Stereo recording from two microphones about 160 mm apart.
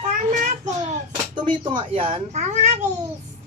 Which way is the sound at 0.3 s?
50° right (ahead or behind).